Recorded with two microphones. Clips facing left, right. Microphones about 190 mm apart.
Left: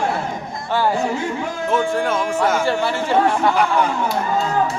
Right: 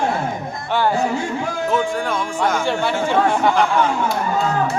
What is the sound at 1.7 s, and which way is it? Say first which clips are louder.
Speech: left 2 dB; centre (ahead or behind).